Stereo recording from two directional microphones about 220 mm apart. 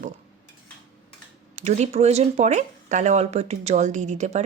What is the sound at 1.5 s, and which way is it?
Speech, 30° right (ahead or behind).